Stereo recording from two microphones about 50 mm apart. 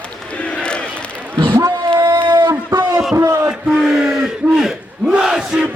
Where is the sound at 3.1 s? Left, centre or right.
Right.